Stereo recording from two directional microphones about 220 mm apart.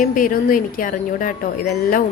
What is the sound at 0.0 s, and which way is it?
A woman's voice, 40° left (ahead or behind).